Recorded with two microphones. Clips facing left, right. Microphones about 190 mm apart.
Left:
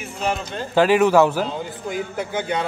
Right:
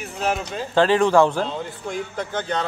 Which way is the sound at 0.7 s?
10° left (ahead or behind).